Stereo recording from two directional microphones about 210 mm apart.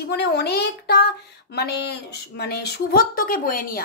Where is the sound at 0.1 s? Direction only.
50° left (ahead or behind).